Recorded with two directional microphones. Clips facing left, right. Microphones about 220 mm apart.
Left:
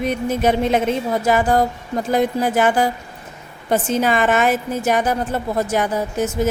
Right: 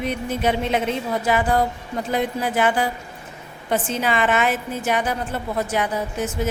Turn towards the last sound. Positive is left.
turn(degrees=45)  # may be behind; listen again after turning